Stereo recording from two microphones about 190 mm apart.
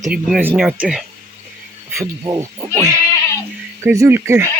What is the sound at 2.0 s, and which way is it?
Speech, 15° right (ahead or behind).